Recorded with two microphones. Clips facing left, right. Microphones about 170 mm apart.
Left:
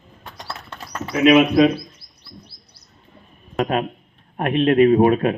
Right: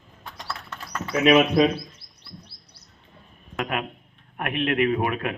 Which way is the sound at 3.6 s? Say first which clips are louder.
Left 7 dB; 30° left (ahead or behind).